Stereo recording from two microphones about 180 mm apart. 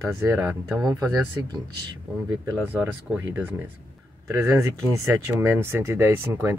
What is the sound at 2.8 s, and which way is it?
Speech, 10° right (ahead or behind).